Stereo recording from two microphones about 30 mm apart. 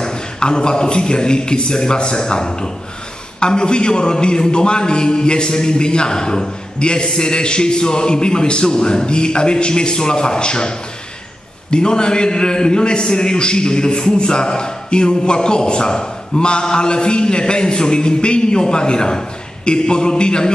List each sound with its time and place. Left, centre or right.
0.0 s a man's voice: left